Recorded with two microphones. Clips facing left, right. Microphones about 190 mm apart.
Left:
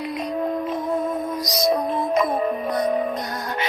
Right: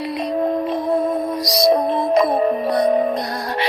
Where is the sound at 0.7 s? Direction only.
35° right (ahead or behind).